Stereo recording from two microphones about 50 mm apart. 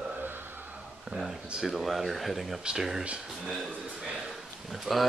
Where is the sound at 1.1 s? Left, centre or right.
Right.